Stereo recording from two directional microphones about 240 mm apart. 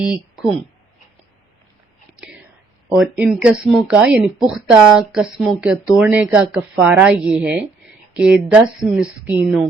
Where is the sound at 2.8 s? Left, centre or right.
Centre.